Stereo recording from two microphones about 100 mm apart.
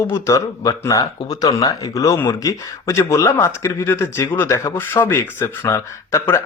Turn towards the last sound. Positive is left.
turn(degrees=25)  # may be behind; listen again after turning